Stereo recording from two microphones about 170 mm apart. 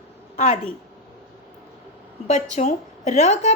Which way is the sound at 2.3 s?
45° left (ahead or behind).